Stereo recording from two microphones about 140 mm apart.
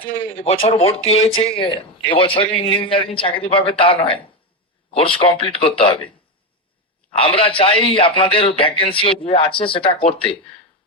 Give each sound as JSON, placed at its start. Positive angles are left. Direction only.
{"t": 0.0, "sound": "speech", "side_deg": 45}
{"t": 7.1, "sound": "speech", "side_deg": 40}